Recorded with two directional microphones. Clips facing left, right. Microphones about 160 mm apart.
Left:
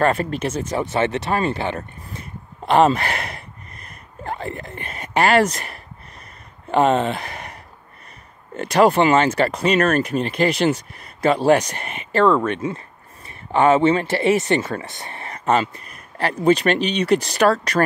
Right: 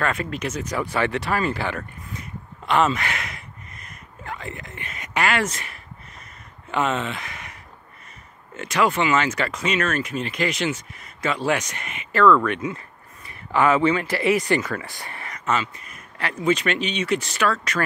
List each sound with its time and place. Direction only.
0.0 s speech: 35° left (ahead or behind)
8.5 s speech: 35° left (ahead or behind)